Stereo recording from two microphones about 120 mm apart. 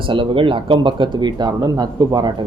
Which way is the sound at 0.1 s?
45° right (ahead or behind).